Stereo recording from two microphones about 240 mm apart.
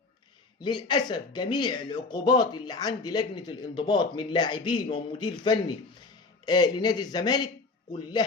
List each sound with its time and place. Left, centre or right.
0.6 s a man's voice: centre